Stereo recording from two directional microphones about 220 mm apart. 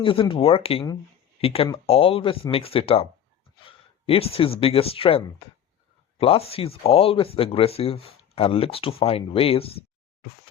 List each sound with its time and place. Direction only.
0.0 s speech: 25° left (ahead or behind)